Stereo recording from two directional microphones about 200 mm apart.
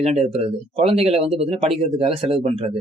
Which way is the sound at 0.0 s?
30° right (ahead or behind).